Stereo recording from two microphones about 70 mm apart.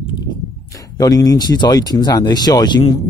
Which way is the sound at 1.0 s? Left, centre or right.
Left.